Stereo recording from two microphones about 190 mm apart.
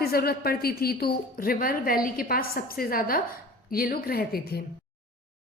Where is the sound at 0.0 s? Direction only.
55° left (ahead or behind).